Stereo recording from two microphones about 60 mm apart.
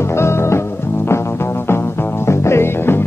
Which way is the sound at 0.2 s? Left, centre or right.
Left.